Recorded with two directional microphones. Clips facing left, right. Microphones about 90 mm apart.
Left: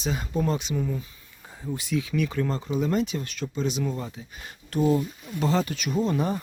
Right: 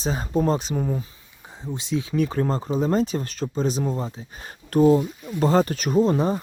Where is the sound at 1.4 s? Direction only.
20° right (ahead or behind).